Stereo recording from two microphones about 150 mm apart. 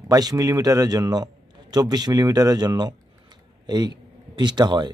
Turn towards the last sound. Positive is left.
turn(degrees=-30)  # may be behind; listen again after turning